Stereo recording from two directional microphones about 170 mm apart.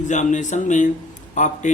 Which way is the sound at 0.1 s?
45° left (ahead or behind).